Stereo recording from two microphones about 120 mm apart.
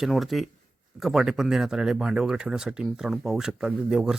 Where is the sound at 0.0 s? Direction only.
Centre (ahead or behind).